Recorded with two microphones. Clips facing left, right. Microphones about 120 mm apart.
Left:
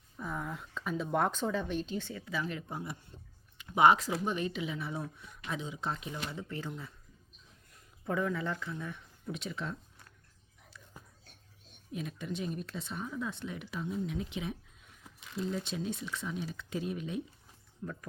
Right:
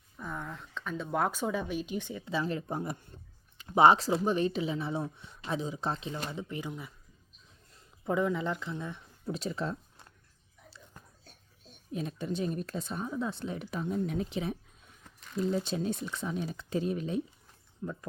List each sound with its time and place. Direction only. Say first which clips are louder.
0.2 s speech: left 1 dB; 5° left (ahead or behind); by 2.3 s 15° right (ahead or behind)
2.3 s speech: right 5 dB; 35° right (ahead or behind)
6.3 s speech: right 2 dB; 15° right (ahead or behind)
7.7 s speech: right 3 dB; 25° right (ahead or behind)
9.2 s speech: right 5 dB; 35° right (ahead or behind)
11.0 s biting: left 3 dB; 10° left (ahead or behind)
11.9 s speech: right 4 dB; 35° right (ahead or behind)
15.0 s a sound: right 5 dB; 5° left (ahead or behind)
15.4 s speech: right 5 dB; 35° right (ahead or behind)